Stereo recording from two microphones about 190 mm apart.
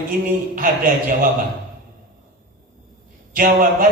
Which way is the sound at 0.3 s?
45° right (ahead or behind).